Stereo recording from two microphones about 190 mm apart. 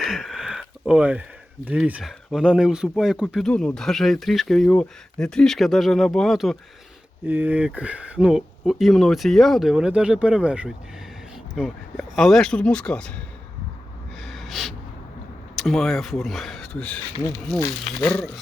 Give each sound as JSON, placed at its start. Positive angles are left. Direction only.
{"t": 0.0, "sound": "a sound", "side_deg": 0}
{"t": 1.6, "sound": "speech", "side_deg": -5}
{"t": 14.2, "sound": "gasp", "side_deg": 0}
{"t": 15.5, "sound": "speech", "side_deg": 0}
{"t": 17.2, "sound": "speech", "side_deg": 20}